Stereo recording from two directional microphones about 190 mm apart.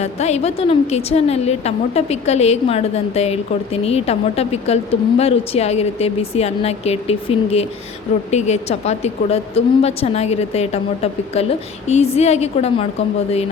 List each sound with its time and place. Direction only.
0.0 s a woman's voice: 35° left (ahead or behind)